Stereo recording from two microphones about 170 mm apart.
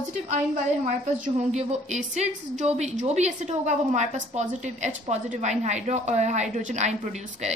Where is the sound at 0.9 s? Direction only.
45° right (ahead or behind).